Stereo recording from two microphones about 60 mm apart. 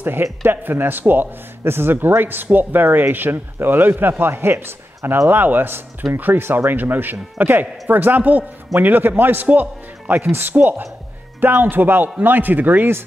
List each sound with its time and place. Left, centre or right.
0.0 s a man's voice: right